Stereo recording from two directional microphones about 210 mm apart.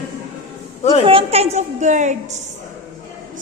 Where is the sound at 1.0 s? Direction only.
25° right (ahead or behind).